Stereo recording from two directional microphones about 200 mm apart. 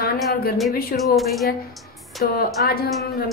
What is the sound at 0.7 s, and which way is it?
Speech, 45° left (ahead or behind).